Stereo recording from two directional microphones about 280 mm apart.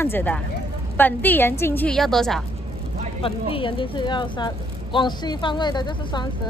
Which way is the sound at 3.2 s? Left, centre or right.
Centre.